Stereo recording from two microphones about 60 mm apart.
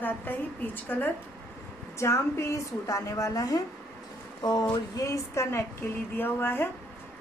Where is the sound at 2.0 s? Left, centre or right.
Left.